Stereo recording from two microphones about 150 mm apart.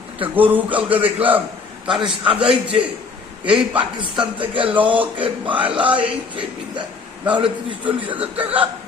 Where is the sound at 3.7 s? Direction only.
35° right (ahead or behind).